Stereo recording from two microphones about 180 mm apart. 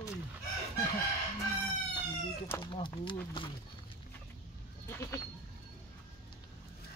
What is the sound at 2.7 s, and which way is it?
Speech, 25° left (ahead or behind).